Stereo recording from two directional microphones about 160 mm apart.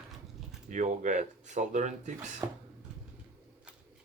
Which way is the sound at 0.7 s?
50° right (ahead or behind).